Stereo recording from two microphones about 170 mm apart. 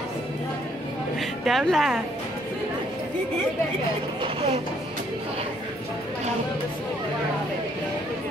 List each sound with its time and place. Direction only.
1.4 s a woman's voice: centre (ahead or behind)
4.2 s vehicle: 35° right (ahead or behind)